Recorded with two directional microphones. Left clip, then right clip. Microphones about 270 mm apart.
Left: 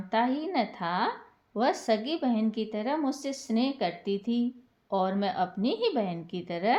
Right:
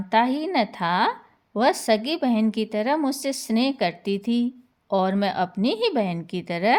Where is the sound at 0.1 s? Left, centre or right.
Right.